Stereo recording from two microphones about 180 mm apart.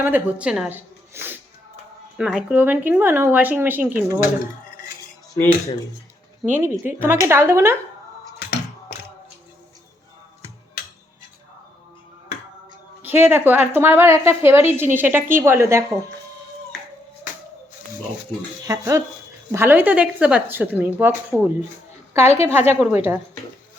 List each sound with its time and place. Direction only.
0.0 s speech: 10° right (ahead or behind)
6.4 s speech: 10° right (ahead or behind)
8.4 s a sound: 65° left (ahead or behind)
13.0 s speech: 10° right (ahead or behind)
18.6 s speech: 15° right (ahead or behind)